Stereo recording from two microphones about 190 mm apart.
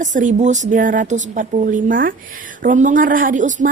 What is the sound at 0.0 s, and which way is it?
A woman's voice, 40° right (ahead or behind).